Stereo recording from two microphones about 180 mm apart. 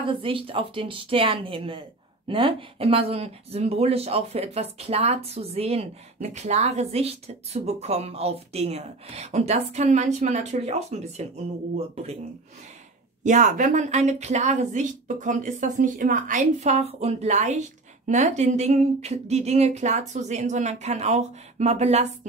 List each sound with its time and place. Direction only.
0.0 s a woman's voice: 30° right (ahead or behind)
13.2 s a woman's voice: 45° right (ahead or behind)